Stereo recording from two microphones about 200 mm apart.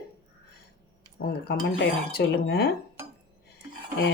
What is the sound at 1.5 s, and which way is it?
Speech, 50° left (ahead or behind).